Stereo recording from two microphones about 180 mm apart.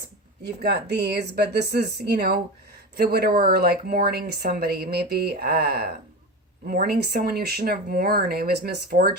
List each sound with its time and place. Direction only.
0.4 s speech: 60° right (ahead or behind)